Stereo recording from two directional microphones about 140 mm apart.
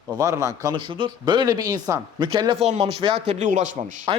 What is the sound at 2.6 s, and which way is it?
Speech, 50° right (ahead or behind).